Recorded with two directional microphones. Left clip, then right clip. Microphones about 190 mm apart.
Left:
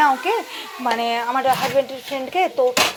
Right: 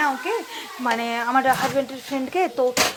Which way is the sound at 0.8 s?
15° right (ahead or behind).